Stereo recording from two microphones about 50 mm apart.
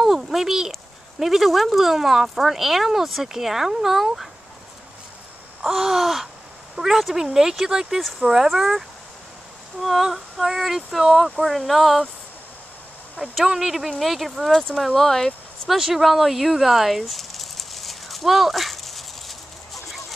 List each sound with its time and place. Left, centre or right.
0.0 s speech: centre
5.6 s speech: centre
13.2 s speech: centre
15.7 s a sound: centre